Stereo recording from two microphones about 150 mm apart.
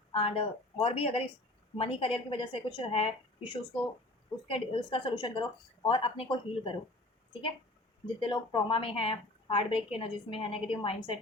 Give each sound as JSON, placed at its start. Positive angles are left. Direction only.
{"t": 0.1, "sound": "a woman's voice", "side_deg": 40}
{"t": 4.4, "sound": "a woman's voice", "side_deg": 40}
{"t": 8.0, "sound": "a woman's voice", "side_deg": 35}